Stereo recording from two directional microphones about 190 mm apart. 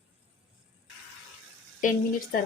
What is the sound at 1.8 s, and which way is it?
Speech, 45° left (ahead or behind).